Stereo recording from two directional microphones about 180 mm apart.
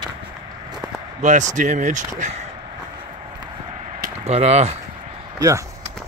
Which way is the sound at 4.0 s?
35° right (ahead or behind).